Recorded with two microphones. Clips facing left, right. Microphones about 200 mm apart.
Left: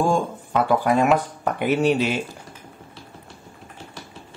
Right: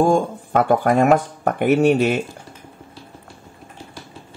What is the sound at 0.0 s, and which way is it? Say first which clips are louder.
Speech: right 5 dB; 50° right (ahead or behind).